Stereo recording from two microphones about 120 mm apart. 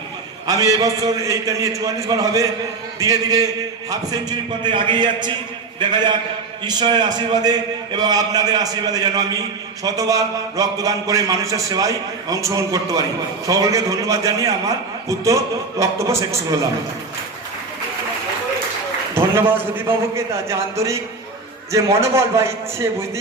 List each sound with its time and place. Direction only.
0.4 s a man's voice: 30° right (ahead or behind)
19.1 s a man's voice: 20° right (ahead or behind)